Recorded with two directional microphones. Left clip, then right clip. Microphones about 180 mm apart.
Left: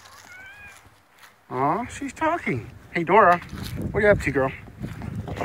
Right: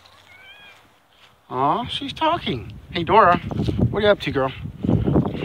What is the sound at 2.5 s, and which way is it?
Speech, 15° right (ahead or behind).